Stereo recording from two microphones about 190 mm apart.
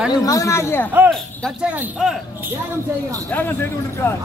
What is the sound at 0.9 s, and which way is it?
Speech, 10° right (ahead or behind).